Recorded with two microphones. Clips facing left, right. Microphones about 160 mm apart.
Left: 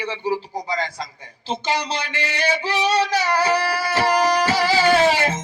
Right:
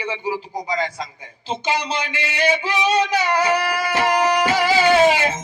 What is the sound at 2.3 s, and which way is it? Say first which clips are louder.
Music: right 2 dB; 15° right (ahead or behind).